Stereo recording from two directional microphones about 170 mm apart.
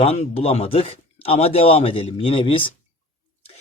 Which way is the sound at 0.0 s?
35° left (ahead or behind).